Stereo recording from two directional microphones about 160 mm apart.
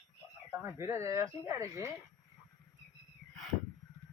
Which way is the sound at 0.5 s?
15° right (ahead or behind).